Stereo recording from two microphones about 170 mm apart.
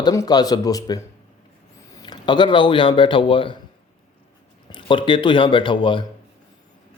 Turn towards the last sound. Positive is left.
turn(degrees=30)  # may be behind; listen again after turning